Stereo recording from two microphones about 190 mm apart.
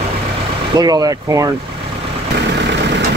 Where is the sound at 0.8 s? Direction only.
20° right (ahead or behind).